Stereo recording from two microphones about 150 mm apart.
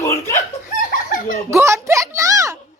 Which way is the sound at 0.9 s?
65° left (ahead or behind).